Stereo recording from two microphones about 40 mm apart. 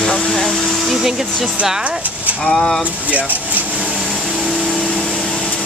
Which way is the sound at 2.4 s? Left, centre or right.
Centre.